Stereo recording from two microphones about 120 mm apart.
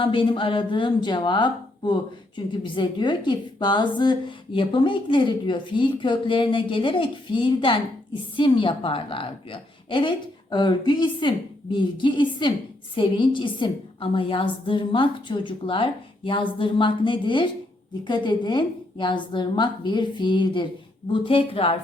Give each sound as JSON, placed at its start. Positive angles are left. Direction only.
{"t": 0.0, "sound": "a woman's voice", "side_deg": 45}